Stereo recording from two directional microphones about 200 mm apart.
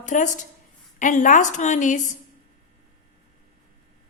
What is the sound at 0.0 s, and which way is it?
A woman's voice, 40° left (ahead or behind).